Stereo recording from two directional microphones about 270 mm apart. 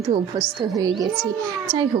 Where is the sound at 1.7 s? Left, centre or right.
Centre.